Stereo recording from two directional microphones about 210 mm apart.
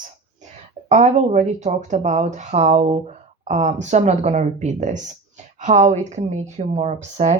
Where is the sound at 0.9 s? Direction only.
30° right (ahead or behind).